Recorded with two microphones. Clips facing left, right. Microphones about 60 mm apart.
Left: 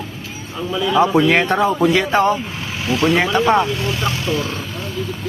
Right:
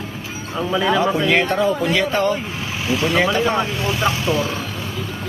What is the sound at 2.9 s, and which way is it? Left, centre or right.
Speech, centre.